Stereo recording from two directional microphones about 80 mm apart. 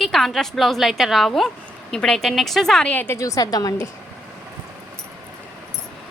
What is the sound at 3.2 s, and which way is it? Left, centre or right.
Speech, left.